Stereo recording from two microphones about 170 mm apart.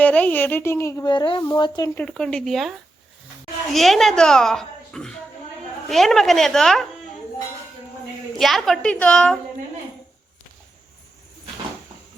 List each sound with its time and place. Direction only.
0.0 s speech: 10° left (ahead or behind); by 1.9 s 25° left (ahead or behind)
2.0 s a child's voice: 5° left (ahead or behind)
8.4 s a child's voice: centre (ahead or behind)